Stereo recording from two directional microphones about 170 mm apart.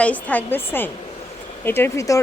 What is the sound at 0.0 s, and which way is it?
Speech, 10° left (ahead or behind).